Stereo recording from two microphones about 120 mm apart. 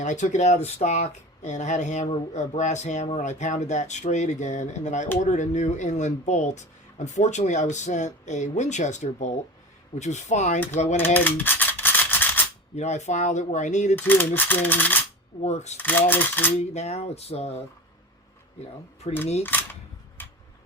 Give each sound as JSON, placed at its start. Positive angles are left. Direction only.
{"t": 0.0, "sound": "speech", "side_deg": 90}
{"t": 3.2, "sound": "speech", "side_deg": 90}
{"t": 10.9, "sound": "rattle", "side_deg": 15}
{"t": 12.7, "sound": "speech", "side_deg": 70}
{"t": 13.9, "sound": "coin", "side_deg": 15}
{"t": 15.4, "sound": "speech", "side_deg": 70}
{"t": 15.8, "sound": "coin", "side_deg": 15}
{"t": 16.7, "sound": "speech", "side_deg": 70}
{"t": 19.1, "sound": "speech", "side_deg": 55}
{"t": 19.4, "sound": "coin", "side_deg": 15}
{"t": 20.2, "sound": "a sound", "side_deg": 15}